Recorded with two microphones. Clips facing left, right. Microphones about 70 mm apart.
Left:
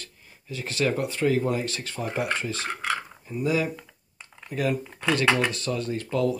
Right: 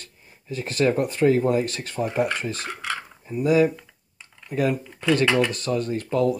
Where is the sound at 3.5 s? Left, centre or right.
Right.